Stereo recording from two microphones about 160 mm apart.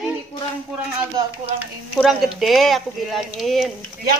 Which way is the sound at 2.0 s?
Centre (ahead or behind).